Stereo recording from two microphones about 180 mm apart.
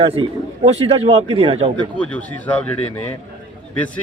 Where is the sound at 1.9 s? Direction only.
5° left (ahead or behind).